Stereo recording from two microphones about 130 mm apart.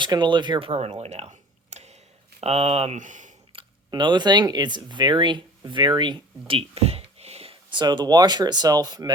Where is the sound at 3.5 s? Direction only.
35° right (ahead or behind).